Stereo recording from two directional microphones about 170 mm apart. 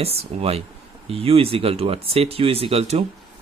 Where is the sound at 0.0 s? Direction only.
35° right (ahead or behind).